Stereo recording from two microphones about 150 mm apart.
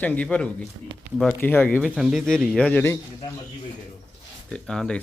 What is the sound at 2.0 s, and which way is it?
Speech, centre (ahead or behind).